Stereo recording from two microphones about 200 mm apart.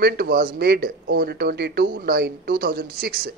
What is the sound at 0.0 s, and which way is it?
Speech, 50° right (ahead or behind).